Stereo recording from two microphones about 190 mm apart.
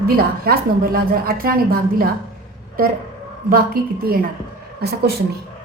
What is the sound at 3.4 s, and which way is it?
Speech, 50° right (ahead or behind).